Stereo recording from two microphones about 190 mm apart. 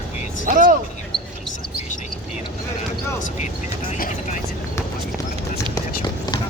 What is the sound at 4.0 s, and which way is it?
Vehicle, 45° left (ahead or behind).